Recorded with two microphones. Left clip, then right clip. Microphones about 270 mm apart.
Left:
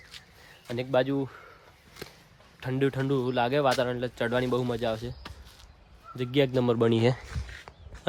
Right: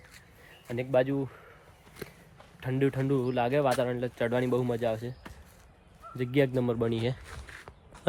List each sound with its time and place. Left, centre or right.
0.7 s speech: centre
2.6 s speech: centre
6.6 s speech: left